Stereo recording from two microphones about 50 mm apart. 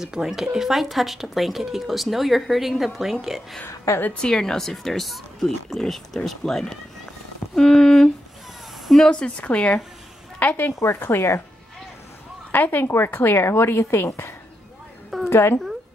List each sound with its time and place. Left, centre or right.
0.0 s speech: centre
4.1 s speech: centre
7.5 s a sound: centre
9.1 s speech: left
10.6 s speech: left
12.4 s a woman's voice: left
12.8 s a woman's voice: left